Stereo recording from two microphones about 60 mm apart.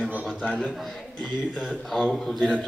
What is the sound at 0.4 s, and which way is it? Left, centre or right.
Speech, centre.